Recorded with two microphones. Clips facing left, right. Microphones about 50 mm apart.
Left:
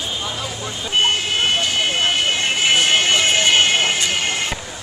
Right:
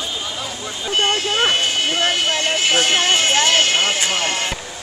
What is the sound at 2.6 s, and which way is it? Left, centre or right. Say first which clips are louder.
Vehicle: left 2 dB; centre.